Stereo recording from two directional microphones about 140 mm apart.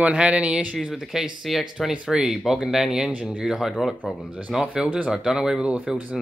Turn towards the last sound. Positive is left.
turn(degrees=-10)  # may be behind; listen again after turning